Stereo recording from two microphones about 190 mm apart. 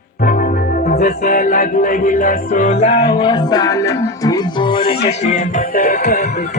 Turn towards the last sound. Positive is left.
turn(degrees=55)  # may be behind; listen again after turning